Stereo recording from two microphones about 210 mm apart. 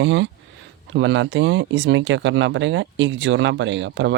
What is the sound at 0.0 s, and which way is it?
Speech, 60° right (ahead or behind).